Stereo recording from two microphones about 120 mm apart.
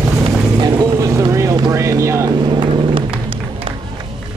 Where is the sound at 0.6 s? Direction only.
30° right (ahead or behind).